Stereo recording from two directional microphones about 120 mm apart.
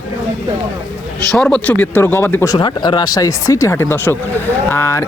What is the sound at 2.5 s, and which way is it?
Speech, 35° left (ahead or behind).